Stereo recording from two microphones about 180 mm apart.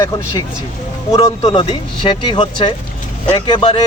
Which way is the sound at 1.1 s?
20° left (ahead or behind).